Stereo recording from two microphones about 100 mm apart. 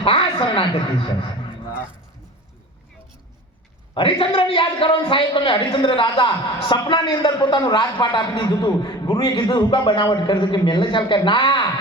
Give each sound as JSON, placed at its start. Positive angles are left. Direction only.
{"t": 0.0, "sound": "a woman's voice", "side_deg": 60}
{"t": 3.9, "sound": "a man's voice", "side_deg": 65}